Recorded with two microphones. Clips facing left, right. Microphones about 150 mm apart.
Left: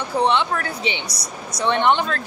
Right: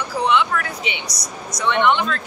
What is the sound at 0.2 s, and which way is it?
Speech, 30° left (ahead or behind).